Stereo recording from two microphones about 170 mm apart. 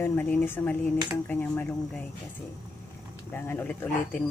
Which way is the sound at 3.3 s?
10° left (ahead or behind).